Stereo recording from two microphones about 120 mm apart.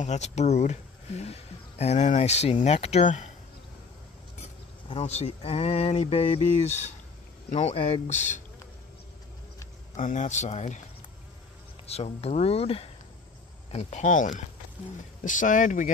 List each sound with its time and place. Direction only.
0.0 s speech: 75° left (ahead or behind)
4.8 s speech: 60° left (ahead or behind); by 8.4 s 80° left
9.9 s speech: 90° left
11.9 s speech: 60° left (ahead or behind)
13.7 s speech: 70° left (ahead or behind); by 15.9 s 90° left